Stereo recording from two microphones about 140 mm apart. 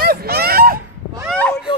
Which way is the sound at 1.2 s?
10° left (ahead or behind).